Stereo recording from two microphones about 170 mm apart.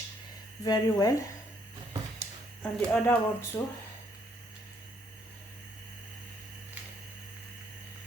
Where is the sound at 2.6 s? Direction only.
10° left (ahead or behind).